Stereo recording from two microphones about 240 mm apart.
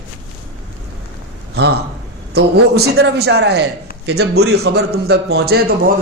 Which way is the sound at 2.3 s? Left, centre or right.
Right.